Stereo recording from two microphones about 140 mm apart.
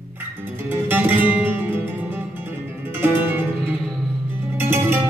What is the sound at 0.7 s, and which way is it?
Music, 15° right (ahead or behind).